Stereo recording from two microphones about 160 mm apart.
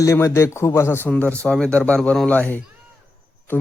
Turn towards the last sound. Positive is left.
turn(degrees=10)  # may be behind; listen again after turning